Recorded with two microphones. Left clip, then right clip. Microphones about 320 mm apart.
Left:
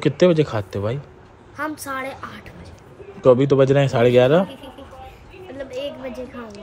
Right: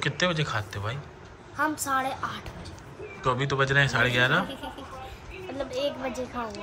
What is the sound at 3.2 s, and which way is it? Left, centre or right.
Speech, centre.